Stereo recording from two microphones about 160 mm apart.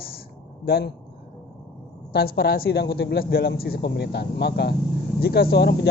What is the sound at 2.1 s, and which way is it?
Speech, 75° left (ahead or behind).